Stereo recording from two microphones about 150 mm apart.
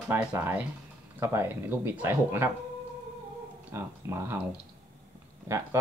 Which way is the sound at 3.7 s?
15° right (ahead or behind).